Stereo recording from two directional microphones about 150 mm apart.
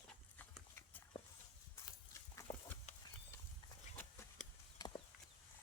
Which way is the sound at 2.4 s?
20° left (ahead or behind).